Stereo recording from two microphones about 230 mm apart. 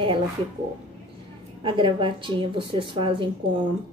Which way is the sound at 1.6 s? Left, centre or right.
Right.